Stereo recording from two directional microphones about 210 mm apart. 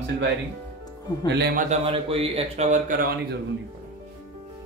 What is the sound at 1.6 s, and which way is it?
Speech, 30° right (ahead or behind).